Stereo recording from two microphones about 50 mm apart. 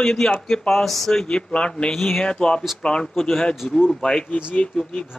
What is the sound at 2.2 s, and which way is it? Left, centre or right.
Speech, centre.